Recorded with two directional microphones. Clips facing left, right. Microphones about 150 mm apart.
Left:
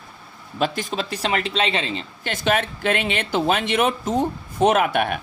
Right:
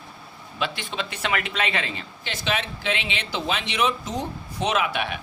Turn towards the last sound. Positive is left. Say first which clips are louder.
# left 6 dB
turn(degrees=50)  # may be behind; listen again after turning